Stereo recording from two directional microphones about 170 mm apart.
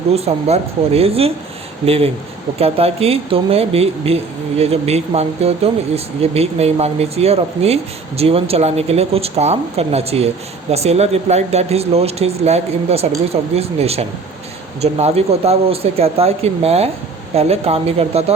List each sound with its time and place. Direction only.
0.1 s speech: 35° right (ahead or behind)